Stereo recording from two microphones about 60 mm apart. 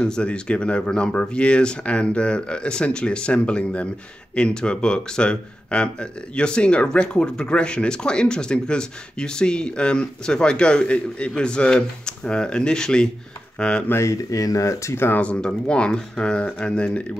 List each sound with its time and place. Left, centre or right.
0.0 s speech: centre
14.0 s speech: left
15.1 s speech: left